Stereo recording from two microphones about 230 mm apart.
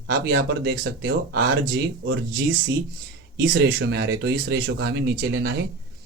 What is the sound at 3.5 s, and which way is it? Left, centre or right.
Speech, right.